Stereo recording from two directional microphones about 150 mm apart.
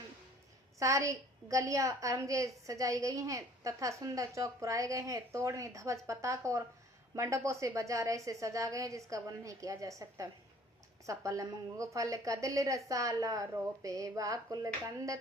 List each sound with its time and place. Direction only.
0.8 s a woman's voice: 20° right (ahead or behind)